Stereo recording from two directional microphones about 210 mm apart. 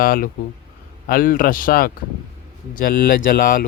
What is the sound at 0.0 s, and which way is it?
Speech, 45° left (ahead or behind).